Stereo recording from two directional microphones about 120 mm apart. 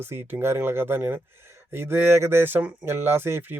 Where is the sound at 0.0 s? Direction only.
20° right (ahead or behind).